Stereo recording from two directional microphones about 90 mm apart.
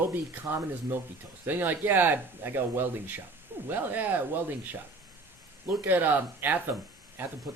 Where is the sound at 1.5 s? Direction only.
20° right (ahead or behind).